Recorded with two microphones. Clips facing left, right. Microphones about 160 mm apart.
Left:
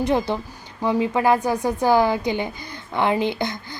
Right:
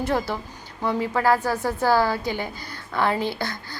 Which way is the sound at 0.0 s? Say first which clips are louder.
Left 4 dB; 20° left (ahead or behind).